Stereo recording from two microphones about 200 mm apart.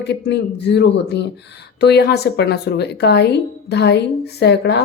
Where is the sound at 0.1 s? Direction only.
60° left (ahead or behind).